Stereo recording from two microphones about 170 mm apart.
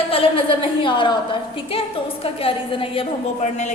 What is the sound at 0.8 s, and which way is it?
A woman's voice, 30° left (ahead or behind).